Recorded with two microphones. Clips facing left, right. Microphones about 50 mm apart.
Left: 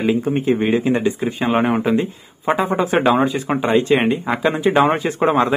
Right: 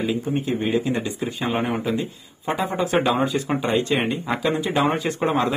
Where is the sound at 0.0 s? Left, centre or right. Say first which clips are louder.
Left 6 dB; left.